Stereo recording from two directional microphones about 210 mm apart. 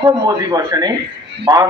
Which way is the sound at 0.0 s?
20° right (ahead or behind).